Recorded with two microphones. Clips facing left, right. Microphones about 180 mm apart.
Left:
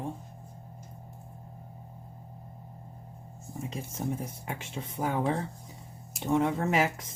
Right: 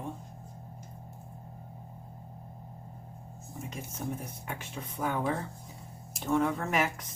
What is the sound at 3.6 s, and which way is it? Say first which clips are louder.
Speech: left 4 dB; 30° left (ahead or behind).